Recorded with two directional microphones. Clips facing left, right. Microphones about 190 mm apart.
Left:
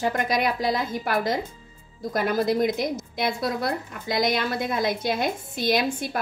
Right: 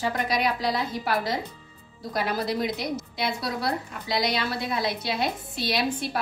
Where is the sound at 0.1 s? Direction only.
50° left (ahead or behind).